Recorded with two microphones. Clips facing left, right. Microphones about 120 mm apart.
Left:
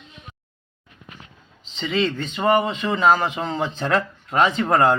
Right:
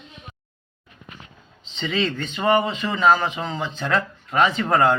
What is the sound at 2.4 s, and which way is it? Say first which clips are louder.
Speech: left 1 dB; 15° left (ahead or behind).